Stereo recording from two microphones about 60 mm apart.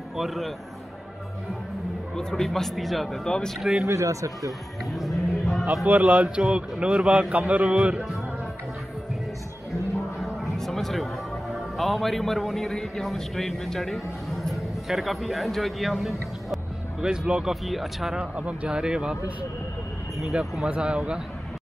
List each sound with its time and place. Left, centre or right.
0.2 s a man's voice: centre
2.1 s a man's voice: centre
3.3 s speech: centre
3.8 s speech: right
4.5 s music: centre
5.9 s a man's voice: right
6.3 s a man's voice: centre
10.2 s a sound: centre
11.5 s a man's voice: centre
17.0 s a man's voice: centre
18.2 s speech: right
20.2 s speech: centre